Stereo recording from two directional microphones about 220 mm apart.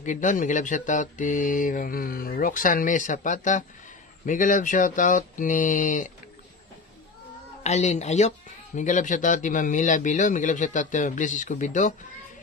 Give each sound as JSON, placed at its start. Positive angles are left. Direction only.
{"t": 0.0, "sound": "speech", "side_deg": 35}
{"t": 7.6, "sound": "speech", "side_deg": 30}